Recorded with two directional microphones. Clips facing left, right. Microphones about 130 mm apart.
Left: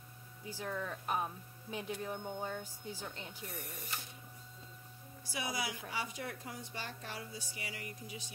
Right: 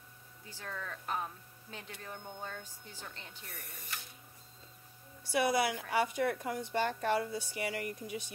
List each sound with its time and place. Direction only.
0.5 s speech: 15° left (ahead or behind)
5.2 s a woman's voice: 60° right (ahead or behind)